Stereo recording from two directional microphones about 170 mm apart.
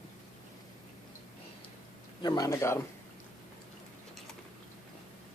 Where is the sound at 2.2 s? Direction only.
20° left (ahead or behind).